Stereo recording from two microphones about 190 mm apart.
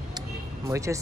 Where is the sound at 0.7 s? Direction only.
15° right (ahead or behind).